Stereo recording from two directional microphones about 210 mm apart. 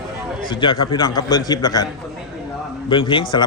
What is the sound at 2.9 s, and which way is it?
Speech, 25° left (ahead or behind).